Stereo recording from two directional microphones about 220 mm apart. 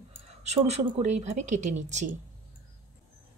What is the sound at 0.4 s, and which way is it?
A woman's voice, 30° right (ahead or behind).